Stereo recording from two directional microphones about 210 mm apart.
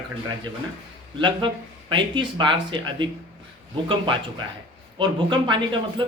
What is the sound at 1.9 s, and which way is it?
Speech, 25° right (ahead or behind).